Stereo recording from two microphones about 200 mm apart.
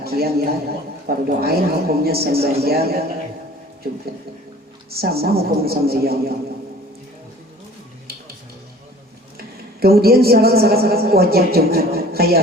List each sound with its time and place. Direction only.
0.0 s a man's voice: 50° right (ahead or behind)
4.9 s a woman's voice: 50° right (ahead or behind)
9.4 s a woman's voice: 50° right (ahead or behind)